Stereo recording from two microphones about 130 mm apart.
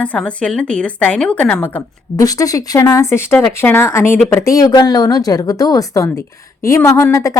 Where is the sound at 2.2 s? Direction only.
25° left (ahead or behind).